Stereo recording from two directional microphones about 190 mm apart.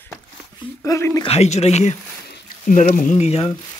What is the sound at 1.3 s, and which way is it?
Speech, 35° left (ahead or behind).